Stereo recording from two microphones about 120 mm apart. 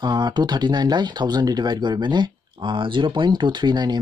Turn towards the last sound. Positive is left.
turn(degrees=-35)  # may be behind; listen again after turning